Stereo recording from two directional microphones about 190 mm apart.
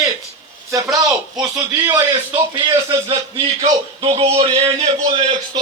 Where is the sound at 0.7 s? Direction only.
20° right (ahead or behind).